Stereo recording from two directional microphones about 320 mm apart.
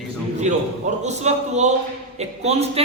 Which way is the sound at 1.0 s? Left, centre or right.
Right.